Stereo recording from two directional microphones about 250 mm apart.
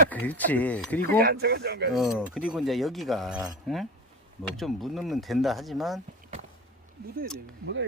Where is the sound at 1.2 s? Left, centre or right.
Right.